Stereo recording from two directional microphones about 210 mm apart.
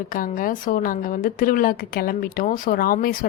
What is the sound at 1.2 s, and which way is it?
Speech, 40° left (ahead or behind).